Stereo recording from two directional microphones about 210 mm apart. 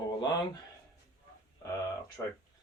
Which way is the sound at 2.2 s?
10° left (ahead or behind).